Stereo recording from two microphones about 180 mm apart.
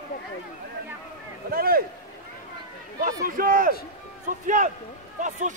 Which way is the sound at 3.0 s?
50° right (ahead or behind).